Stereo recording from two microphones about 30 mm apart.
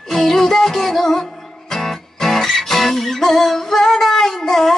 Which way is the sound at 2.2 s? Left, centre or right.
Centre.